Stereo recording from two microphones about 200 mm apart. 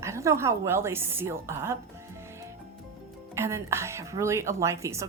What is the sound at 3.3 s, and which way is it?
Speech, 15° right (ahead or behind).